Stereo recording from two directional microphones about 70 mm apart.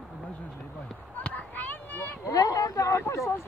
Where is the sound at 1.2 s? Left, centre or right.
Left.